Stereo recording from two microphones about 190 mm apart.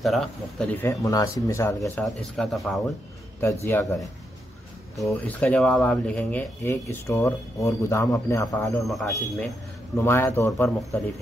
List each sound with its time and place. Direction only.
0.0 s speech: centre (ahead or behind)
0.8 s speech: 15° left (ahead or behind)
2.0 s speech: centre (ahead or behind)
3.6 s speech: 15° left (ahead or behind)
5.0 s speech: 10° left (ahead or behind)
8.8 s speech: centre (ahead or behind)
9.9 s speech: 15° left (ahead or behind)